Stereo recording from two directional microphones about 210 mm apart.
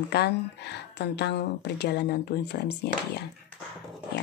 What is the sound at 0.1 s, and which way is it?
A woman's voice, 55° left (ahead or behind).